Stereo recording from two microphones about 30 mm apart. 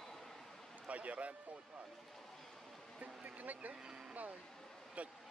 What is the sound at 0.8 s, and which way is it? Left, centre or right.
Speech, right.